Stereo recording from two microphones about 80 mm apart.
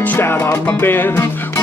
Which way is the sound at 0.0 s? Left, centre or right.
Left.